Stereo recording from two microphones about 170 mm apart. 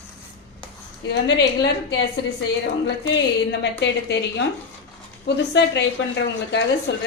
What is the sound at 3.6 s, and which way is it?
Speech, 90° left.